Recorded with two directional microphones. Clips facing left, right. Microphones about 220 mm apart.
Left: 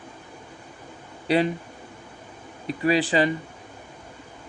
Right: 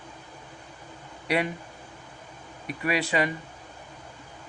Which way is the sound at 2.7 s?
30° left (ahead or behind).